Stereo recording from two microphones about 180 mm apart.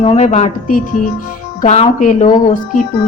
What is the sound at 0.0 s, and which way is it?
A woman's voice, 35° left (ahead or behind).